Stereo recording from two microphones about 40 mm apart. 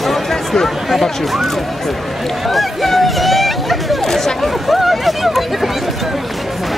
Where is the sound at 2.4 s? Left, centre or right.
Centre.